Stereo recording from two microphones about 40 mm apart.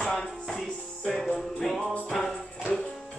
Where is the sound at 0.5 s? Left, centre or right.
Centre.